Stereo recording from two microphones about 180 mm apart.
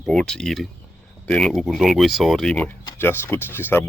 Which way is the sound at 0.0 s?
Centre (ahead or behind).